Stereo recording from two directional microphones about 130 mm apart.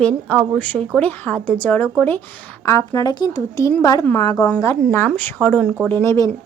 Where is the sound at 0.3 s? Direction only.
5° left (ahead or behind); by 4.4 s 35° left (ahead or behind).